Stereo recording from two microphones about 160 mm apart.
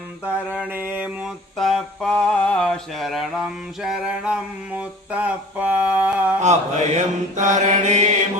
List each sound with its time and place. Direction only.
0.5 s mantra: 10° right (ahead or behind)
1.5 s mantra: centre (ahead or behind)
6.4 s mantra: 45° right (ahead or behind)